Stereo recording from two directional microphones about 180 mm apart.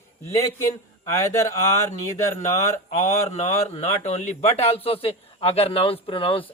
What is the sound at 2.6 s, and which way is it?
Speech, 40° left (ahead or behind).